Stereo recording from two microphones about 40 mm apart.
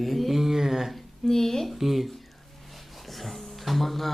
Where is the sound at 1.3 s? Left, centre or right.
Centre.